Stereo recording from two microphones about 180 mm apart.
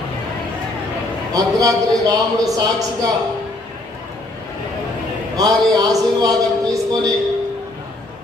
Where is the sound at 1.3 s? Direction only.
20° right (ahead or behind).